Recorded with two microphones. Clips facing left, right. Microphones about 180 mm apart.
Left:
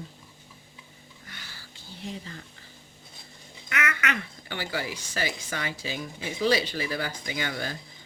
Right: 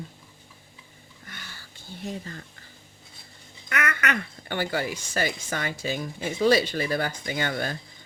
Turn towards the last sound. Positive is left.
turn(degrees=-50)  # may be behind; listen again after turning